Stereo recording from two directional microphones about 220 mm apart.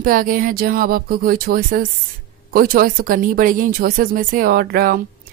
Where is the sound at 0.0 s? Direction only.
40° right (ahead or behind).